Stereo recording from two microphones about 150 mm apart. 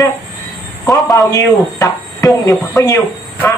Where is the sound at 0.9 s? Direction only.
25° left (ahead or behind).